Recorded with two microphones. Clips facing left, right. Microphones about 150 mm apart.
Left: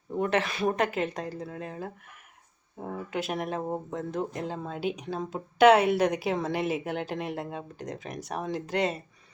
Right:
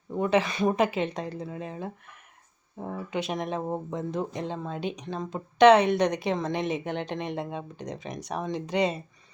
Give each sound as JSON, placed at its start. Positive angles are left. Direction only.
{"t": 0.2, "sound": "speech", "side_deg": 0}